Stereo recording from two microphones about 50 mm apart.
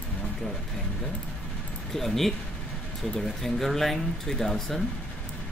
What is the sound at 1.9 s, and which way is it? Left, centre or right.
Speech, centre.